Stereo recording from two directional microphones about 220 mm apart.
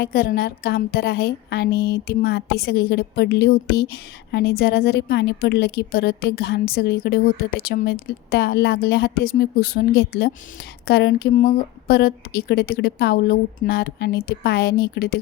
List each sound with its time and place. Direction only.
0.0 s a woman's voice: 45° left (ahead or behind)